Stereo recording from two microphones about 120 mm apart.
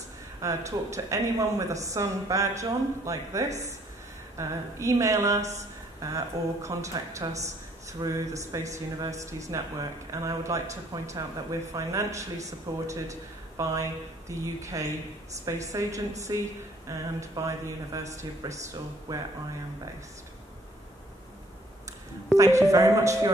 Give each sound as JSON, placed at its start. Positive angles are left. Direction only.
{"t": 0.4, "sound": "speech", "side_deg": -25}
{"t": 22.4, "sound": "speech", "side_deg": -25}